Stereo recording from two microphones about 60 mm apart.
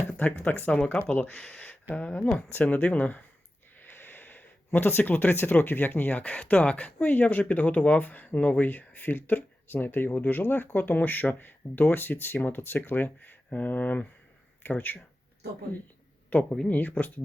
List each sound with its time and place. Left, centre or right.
0.0 s speech: left
3.8 s a sound: left
5.1 s speech: left
16.3 s speech: left